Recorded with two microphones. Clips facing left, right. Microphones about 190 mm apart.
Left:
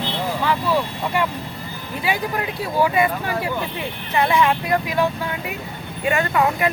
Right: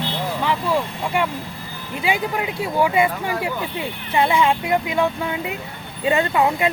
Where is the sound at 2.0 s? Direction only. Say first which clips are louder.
Right 1 dB; 20° right (ahead or behind).